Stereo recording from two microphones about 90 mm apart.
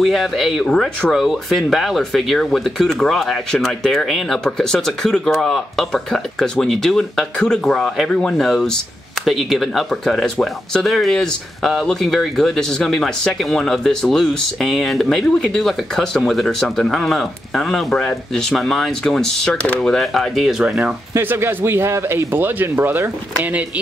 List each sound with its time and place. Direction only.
0.0 s speech: centre (ahead or behind)
1.1 s speech: centre (ahead or behind)
21.1 s speech: 25° right (ahead or behind)